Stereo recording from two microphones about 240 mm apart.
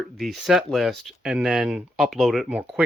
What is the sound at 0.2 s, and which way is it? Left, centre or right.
Speech, centre.